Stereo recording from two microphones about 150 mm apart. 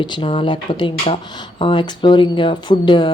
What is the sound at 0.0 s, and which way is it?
Speech, 35° left (ahead or behind).